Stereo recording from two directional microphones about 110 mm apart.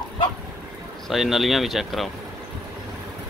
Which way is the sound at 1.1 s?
Centre (ahead or behind).